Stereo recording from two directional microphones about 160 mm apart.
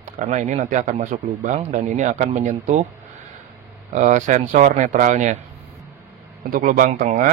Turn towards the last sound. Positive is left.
turn(degrees=-55)  # may be behind; listen again after turning